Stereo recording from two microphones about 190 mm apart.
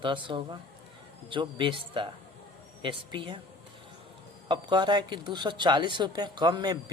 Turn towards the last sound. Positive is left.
turn(degrees=-20)  # may be behind; listen again after turning